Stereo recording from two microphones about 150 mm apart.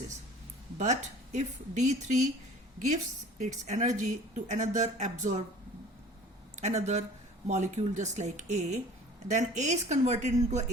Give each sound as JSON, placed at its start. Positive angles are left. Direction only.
{"t": 0.8, "sound": "a woman's voice", "side_deg": -55}
{"t": 6.6, "sound": "a woman's voice", "side_deg": -50}